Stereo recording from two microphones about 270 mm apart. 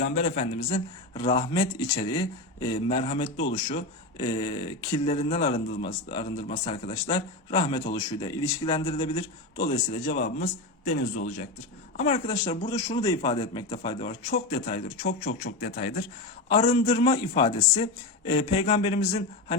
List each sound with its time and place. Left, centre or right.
0.1 s a man's voice: left
10.1 s speech: left
11.9 s a man's voice: left
14.3 s speech: left